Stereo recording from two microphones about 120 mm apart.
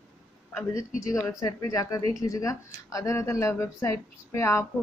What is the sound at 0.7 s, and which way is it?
Speech, 25° left (ahead or behind).